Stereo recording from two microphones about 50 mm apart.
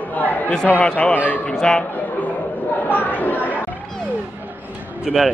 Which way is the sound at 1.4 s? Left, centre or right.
Centre.